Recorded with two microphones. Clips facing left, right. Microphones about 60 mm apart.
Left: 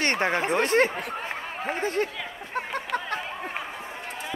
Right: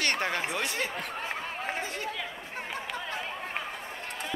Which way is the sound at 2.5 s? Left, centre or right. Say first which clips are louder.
Left 8 dB; left.